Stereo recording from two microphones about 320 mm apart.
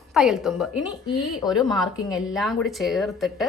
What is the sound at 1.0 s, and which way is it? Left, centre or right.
Speech, centre.